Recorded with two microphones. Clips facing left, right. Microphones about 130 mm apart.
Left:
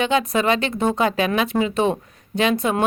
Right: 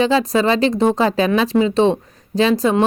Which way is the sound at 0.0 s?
35° right (ahead or behind).